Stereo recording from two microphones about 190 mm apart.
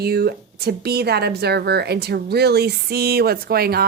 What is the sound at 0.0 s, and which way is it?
A woman's voice, 55° right (ahead or behind).